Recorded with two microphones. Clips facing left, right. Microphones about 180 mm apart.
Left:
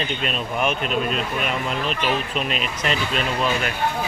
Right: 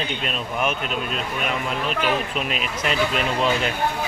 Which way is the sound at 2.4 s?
5° right (ahead or behind).